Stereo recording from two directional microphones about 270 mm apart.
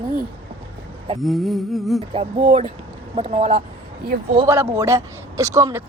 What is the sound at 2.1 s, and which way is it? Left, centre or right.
Speech, right.